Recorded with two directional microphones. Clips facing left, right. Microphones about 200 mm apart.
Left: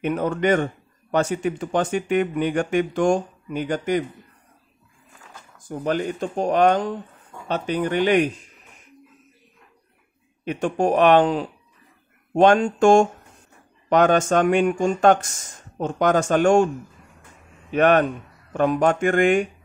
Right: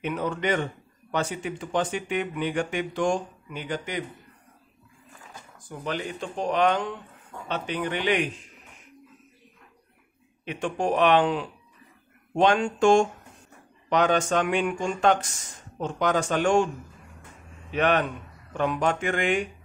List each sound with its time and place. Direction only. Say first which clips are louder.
0.0 s speech: left 6 dB; 50° left (ahead or behind)
5.7 s speech: left 7 dB; 45° left (ahead or behind)
10.4 s speech: left 6 dB; 45° left (ahead or behind)
17.7 s speech: left 6 dB; 50° left (ahead or behind)